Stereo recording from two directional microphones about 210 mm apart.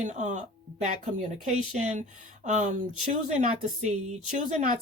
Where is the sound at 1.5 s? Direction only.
35° right (ahead or behind).